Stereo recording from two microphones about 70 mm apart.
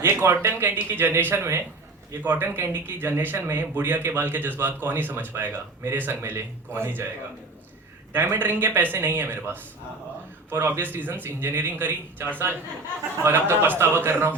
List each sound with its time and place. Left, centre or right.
0.0 s speech: right
8.1 s speech: right